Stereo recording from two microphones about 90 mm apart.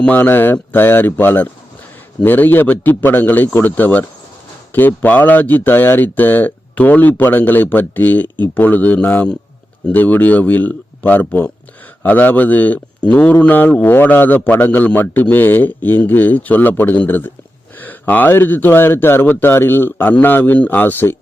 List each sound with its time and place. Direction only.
0.0 s speech: 20° left (ahead or behind)